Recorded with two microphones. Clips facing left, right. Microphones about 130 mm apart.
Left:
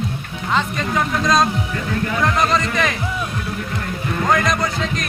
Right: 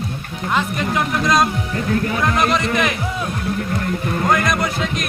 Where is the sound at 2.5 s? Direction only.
5° right (ahead or behind).